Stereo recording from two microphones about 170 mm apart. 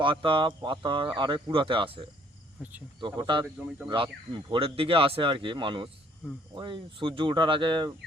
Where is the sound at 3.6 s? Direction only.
5° right (ahead or behind).